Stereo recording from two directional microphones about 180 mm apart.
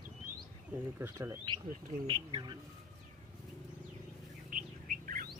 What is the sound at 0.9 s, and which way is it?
Speech, 10° right (ahead or behind).